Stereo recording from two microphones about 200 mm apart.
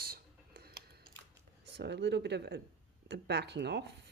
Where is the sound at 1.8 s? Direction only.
60° right (ahead or behind).